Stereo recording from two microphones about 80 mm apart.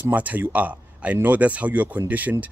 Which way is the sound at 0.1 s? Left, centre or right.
Centre.